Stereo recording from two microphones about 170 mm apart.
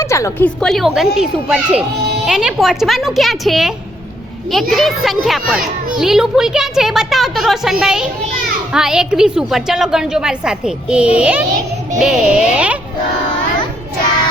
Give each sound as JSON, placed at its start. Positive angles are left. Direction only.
{"t": 0.0, "sound": "a woman's voice", "side_deg": 15}
{"t": 4.7, "sound": "a woman's voice", "side_deg": 0}